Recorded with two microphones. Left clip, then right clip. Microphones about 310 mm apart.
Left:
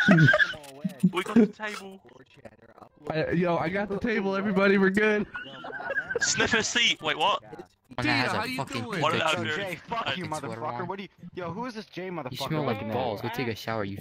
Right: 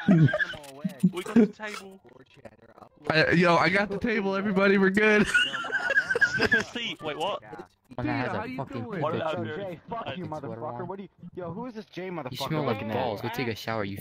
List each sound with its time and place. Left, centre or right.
0.0 s speech: centre
0.5 s neigh: centre
1.2 s speech: centre
3.1 s a man's voice: right
3.9 s a man's voice: centre
5.3 s speech: right
5.9 s a sound: right
6.3 s speech: left
7.9 s speech: left
11.9 s a man's voice: centre